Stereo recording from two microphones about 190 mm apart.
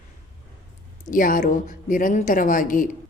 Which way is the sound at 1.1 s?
45° left (ahead or behind).